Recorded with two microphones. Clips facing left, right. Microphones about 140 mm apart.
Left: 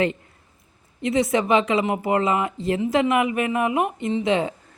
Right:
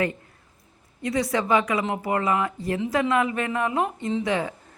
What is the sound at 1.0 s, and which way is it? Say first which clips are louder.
A woman's voice: left 4 dB; 20° left (ahead or behind).